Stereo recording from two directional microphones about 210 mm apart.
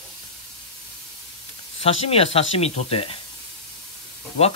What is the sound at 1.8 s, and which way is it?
Speech, 30° left (ahead or behind).